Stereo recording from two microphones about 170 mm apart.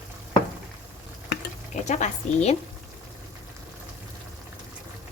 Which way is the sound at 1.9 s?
45° left (ahead or behind).